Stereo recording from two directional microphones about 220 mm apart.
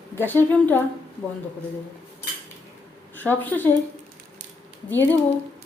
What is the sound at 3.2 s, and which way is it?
Speech, 10° left (ahead or behind).